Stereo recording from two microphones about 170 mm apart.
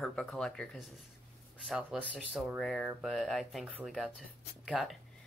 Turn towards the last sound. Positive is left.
turn(degrees=0)  # may be behind; listen again after turning